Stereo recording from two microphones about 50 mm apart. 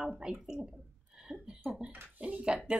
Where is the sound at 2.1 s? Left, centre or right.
Right.